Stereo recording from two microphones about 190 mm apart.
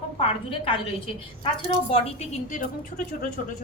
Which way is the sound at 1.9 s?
40° left (ahead or behind).